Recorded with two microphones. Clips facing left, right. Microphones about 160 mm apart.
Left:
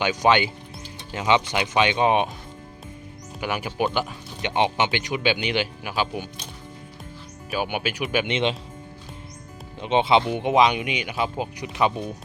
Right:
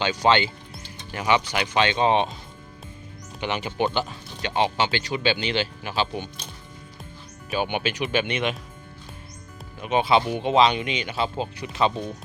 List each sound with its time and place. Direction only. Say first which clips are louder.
0.0 s speech: left 1 dB; 15° left (ahead or behind)
3.4 s speech: even; 10° left (ahead or behind)
7.5 s speech: right 1 dB; 5° left (ahead or behind)
8.3 s speech: left 3 dB; 25° left (ahead or behind)
9.8 s speech: left 1 dB; 25° left (ahead or behind)